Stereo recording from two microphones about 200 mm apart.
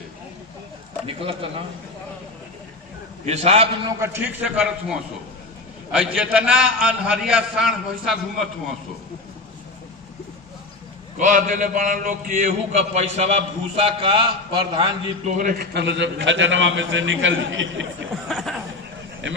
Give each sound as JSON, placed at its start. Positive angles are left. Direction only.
{"t": 1.0, "sound": "speech", "side_deg": -25}
{"t": 3.2, "sound": "a man's voice", "side_deg": -30}
{"t": 4.0, "sound": "a man's voice", "side_deg": -10}
{"t": 11.2, "sound": "a man's voice", "side_deg": -40}
{"t": 15.3, "sound": "a man's voice", "side_deg": -40}
{"t": 15.7, "sound": "a man's voice", "side_deg": -60}
{"t": 18.1, "sound": "chatter", "side_deg": 0}